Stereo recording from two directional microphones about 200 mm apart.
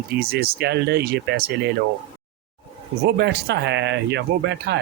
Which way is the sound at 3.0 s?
55° right (ahead or behind).